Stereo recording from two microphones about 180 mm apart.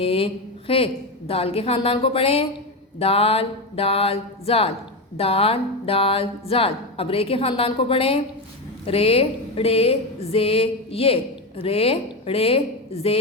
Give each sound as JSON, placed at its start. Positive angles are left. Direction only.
{"t": 0.0, "sound": "a woman's voice", "side_deg": 30}
{"t": 0.7, "sound": "music", "side_deg": 30}